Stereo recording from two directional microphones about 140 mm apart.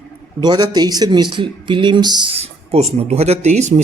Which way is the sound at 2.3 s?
45° right (ahead or behind).